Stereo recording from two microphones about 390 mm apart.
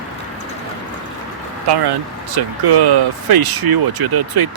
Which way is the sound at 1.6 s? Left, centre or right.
Right.